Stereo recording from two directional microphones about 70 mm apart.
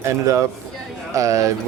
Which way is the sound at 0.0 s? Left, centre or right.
Right.